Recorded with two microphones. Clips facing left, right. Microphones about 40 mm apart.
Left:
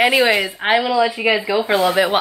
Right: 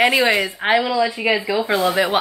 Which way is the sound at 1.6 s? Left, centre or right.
Left.